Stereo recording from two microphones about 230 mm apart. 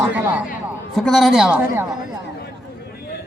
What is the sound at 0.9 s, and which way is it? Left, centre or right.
Speech, centre.